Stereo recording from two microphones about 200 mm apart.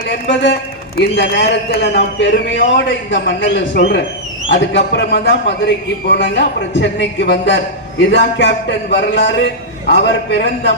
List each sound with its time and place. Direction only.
0.9 s a man's voice: 60° left (ahead or behind)